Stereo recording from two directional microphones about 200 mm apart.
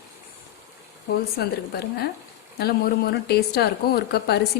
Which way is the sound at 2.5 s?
50° left (ahead or behind).